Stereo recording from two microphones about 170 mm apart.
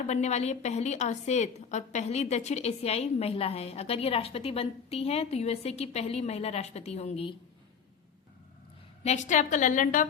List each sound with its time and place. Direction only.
0.1 s a woman's voice: 40° left (ahead or behind)
9.0 s a woman's voice: 45° left (ahead or behind)